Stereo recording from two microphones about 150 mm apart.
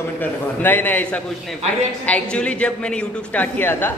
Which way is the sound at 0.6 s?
10° left (ahead or behind).